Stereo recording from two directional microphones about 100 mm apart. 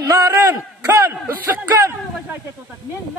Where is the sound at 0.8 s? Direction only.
20° right (ahead or behind).